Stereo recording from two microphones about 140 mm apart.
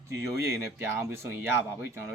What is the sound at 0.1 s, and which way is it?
Speech, 20° right (ahead or behind).